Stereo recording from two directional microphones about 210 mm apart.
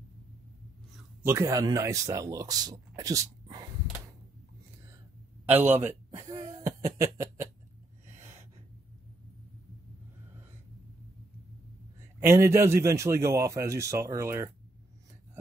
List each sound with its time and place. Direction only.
1.2 s speech: 15° right (ahead or behind)
5.5 s a sound: 10° right (ahead or behind)
12.2 s speech: 10° right (ahead or behind)